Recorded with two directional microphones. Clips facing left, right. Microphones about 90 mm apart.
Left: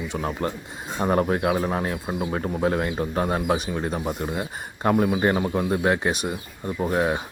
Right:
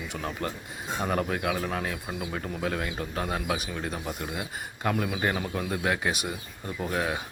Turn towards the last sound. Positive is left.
turn(degrees=30)  # may be behind; listen again after turning